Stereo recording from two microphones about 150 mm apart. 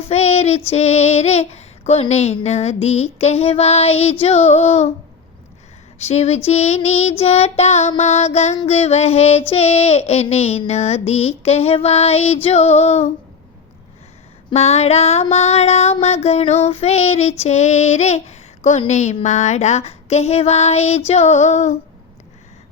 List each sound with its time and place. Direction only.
0.1 s child singing: 45° left (ahead or behind)
6.0 s child singing: 45° left (ahead or behind)
14.5 s child singing: 45° left (ahead or behind)